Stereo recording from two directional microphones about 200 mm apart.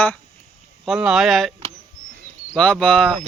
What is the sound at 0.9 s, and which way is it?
A man's voice, centre (ahead or behind).